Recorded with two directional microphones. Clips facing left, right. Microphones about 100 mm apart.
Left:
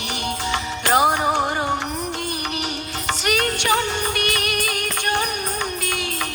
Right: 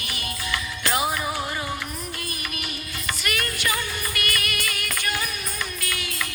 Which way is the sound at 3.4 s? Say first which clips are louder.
Left 8 dB; 70° left (ahead or behind).